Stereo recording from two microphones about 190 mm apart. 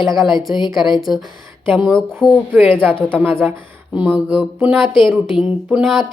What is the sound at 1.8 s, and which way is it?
Speech, centre (ahead or behind).